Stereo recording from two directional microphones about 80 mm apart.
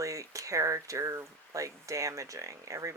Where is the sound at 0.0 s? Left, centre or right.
Right.